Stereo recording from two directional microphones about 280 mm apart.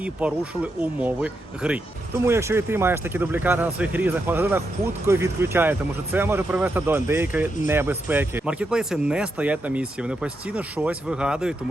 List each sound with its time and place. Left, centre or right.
0.0 s speech: centre